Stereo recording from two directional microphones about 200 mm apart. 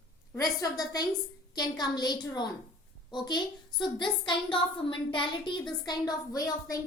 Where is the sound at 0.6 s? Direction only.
20° left (ahead or behind).